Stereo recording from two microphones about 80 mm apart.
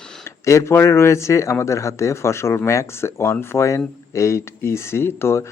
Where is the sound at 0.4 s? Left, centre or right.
Left.